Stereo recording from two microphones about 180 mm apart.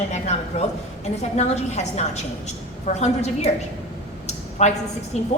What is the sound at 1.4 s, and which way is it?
A woman's voice, 40° left (ahead or behind).